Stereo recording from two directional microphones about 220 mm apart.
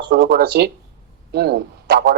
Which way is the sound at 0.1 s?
50° right (ahead or behind).